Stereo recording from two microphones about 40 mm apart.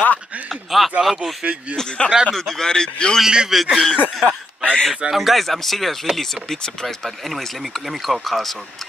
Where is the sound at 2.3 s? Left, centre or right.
Centre.